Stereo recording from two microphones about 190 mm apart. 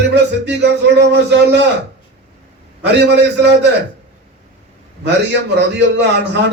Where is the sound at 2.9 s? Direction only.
65° right (ahead or behind).